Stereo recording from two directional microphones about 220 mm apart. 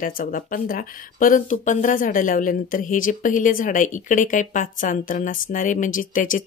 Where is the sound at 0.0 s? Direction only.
40° left (ahead or behind).